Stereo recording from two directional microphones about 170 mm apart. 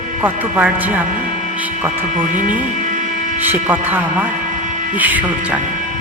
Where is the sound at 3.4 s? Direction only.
10° right (ahead or behind).